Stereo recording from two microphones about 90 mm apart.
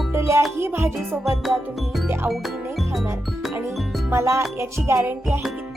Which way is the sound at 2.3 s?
Centre (ahead or behind).